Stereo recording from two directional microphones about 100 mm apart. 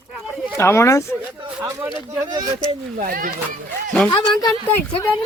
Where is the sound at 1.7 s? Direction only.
35° right (ahead or behind).